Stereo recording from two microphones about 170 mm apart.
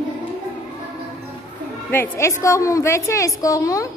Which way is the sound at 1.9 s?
15° left (ahead or behind).